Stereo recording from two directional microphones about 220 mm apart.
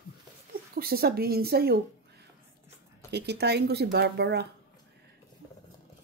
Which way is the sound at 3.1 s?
50° right (ahead or behind).